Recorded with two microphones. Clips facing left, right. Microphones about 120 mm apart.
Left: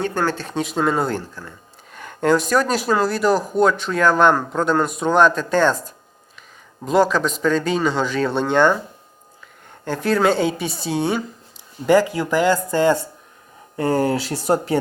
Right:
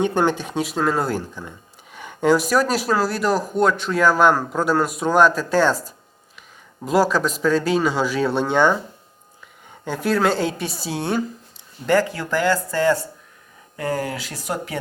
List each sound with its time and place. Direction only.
0.0 s speech: 20° right (ahead or behind); by 1.2 s centre (ahead or behind)
1.4 s speech: 15° right (ahead or behind)
6.8 s speech: 5° right (ahead or behind)
9.8 s speech: 5° right (ahead or behind)
11.9 s speech: 15° left (ahead or behind); by 14.8 s 35° left (ahead or behind)